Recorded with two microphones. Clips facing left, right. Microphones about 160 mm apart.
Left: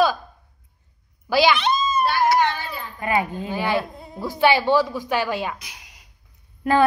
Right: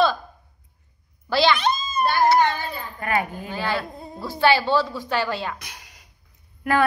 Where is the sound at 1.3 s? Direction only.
15° left (ahead or behind).